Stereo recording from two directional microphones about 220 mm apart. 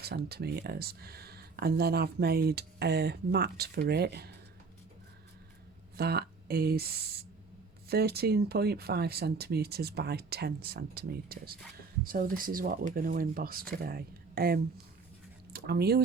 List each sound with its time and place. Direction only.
0.0 s speech: 45° right (ahead or behind)
6.0 s speech: 45° right (ahead or behind)